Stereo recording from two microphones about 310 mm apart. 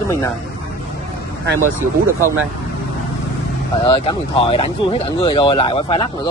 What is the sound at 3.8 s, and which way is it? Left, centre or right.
Speech, centre.